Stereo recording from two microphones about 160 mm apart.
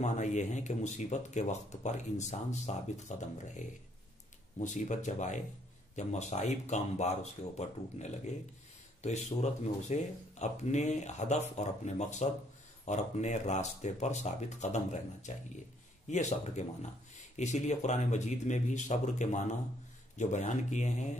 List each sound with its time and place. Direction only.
0.0 s speech: 50° left (ahead or behind)